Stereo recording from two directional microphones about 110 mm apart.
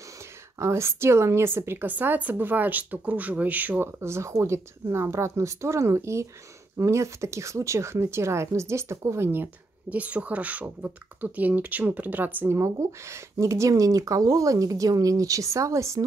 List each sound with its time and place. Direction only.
0.6 s speech: 25° right (ahead or behind)
12.5 s speech: 25° right (ahead or behind)